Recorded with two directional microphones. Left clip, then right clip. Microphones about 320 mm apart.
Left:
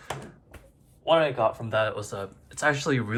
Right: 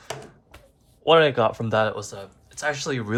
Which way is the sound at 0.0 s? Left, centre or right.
Centre.